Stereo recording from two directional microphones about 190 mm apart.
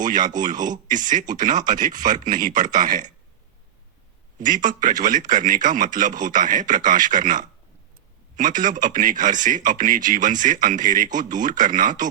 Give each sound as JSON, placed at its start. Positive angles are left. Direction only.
{"t": 0.0, "sound": "speech", "side_deg": -45}
{"t": 4.4, "sound": "speech", "side_deg": -45}